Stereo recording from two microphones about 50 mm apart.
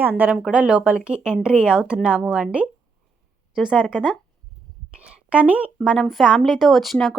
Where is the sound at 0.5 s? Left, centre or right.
Right.